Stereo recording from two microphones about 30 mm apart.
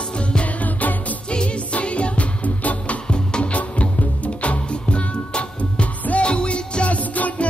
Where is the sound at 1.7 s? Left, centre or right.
Left.